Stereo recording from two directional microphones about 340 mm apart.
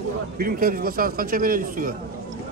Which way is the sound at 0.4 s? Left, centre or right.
Right.